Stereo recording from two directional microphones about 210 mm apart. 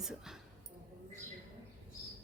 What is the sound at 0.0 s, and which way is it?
Speech, centre (ahead or behind).